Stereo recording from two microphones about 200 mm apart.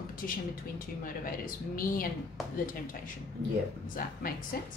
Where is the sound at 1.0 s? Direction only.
45° left (ahead or behind).